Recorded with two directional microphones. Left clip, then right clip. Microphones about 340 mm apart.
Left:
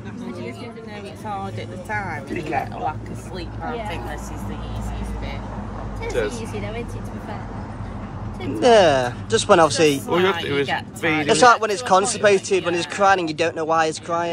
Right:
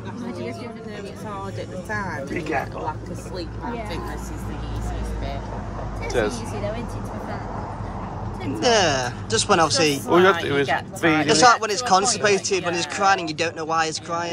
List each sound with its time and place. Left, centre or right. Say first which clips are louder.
6.0 s speech: right 1 dB; right
8.5 s speech: left 5 dB; centre
10.0 s speech: right 3 dB; right
11.2 s speech: left 3 dB; centre